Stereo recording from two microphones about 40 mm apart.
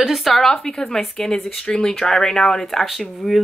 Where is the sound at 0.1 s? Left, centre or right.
Centre.